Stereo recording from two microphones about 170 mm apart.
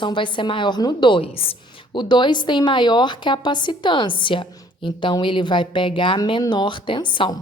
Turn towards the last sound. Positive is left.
turn(degrees=25)  # may be behind; listen again after turning